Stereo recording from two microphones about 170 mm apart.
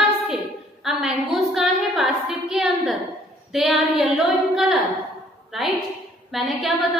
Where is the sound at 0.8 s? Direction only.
Centre (ahead or behind).